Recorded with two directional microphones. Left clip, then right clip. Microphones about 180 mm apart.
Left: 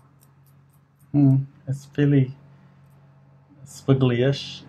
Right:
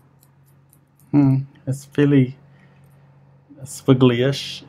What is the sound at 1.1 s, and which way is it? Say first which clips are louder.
Speech: right 3 dB; 40° right (ahead or behind).